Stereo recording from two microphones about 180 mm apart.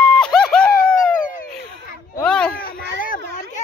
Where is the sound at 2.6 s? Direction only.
50° left (ahead or behind).